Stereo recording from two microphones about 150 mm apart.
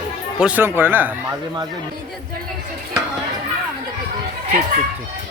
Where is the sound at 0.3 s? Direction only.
10° right (ahead or behind).